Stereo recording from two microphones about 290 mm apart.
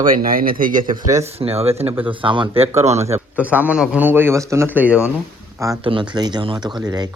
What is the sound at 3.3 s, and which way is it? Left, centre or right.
A man's voice, centre.